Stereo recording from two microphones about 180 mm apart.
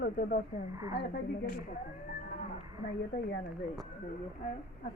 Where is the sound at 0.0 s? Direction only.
55° left (ahead or behind).